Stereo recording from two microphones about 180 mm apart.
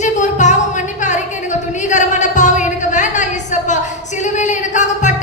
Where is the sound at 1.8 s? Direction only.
40° left (ahead or behind).